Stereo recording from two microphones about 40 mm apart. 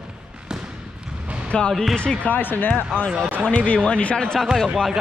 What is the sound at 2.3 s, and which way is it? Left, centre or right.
Speech, left.